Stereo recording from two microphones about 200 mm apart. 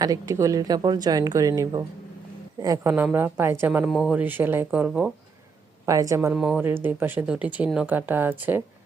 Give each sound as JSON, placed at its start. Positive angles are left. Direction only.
{"t": 0.0, "sound": "speech", "side_deg": -15}
{"t": 5.8, "sound": "speech", "side_deg": -15}
{"t": 6.3, "sound": "speech", "side_deg": -5}